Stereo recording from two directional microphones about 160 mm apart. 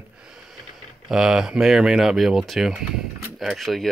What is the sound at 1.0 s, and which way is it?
Speech, 5° right (ahead or behind).